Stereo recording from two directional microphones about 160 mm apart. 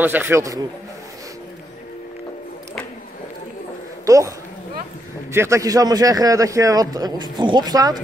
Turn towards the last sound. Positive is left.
turn(degrees=-25)  # may be behind; listen again after turning